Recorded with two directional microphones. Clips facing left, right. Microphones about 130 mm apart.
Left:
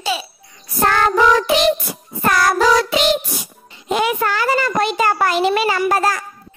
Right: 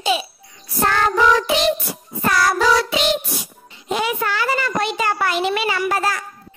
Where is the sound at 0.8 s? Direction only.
50° left (ahead or behind).